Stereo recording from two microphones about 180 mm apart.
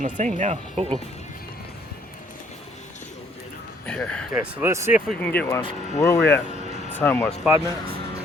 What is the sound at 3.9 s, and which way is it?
Speech, 5° left (ahead or behind).